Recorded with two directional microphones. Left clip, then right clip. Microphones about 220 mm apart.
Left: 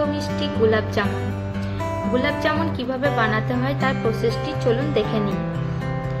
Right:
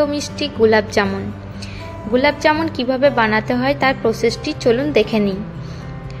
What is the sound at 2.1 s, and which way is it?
Speech, 30° right (ahead or behind).